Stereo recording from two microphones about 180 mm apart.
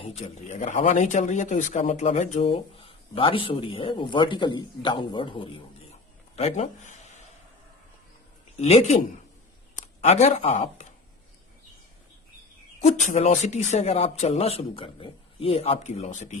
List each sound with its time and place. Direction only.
0.0 s speech: 35° left (ahead or behind)
6.3 s a sound: 35° left (ahead or behind)
8.6 s speech: 40° left (ahead or behind)
12.8 s speech: 40° left (ahead or behind)